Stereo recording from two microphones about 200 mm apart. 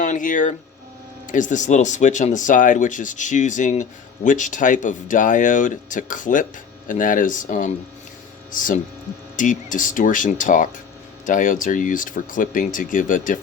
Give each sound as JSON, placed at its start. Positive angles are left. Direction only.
{"t": 0.0, "sound": "speech", "side_deg": 40}